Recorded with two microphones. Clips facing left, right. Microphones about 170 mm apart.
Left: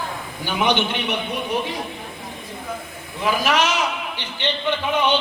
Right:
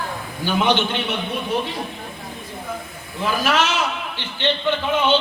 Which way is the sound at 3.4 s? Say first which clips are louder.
Right 1 dB; 15° left (ahead or behind).